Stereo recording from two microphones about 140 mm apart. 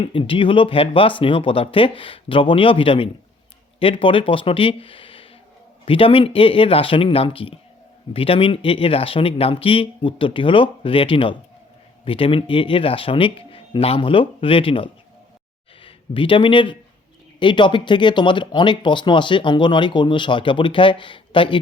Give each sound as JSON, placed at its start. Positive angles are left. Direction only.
{"t": 0.0, "sound": "speech", "side_deg": 40}